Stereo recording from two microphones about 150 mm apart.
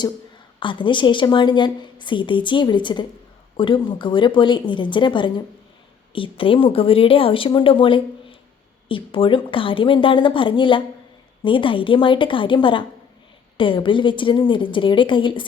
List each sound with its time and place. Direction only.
0.6 s a woman's voice: 35° left (ahead or behind)